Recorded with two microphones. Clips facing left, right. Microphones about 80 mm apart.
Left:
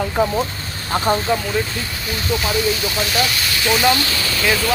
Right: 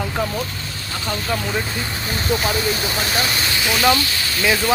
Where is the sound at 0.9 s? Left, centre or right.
Left.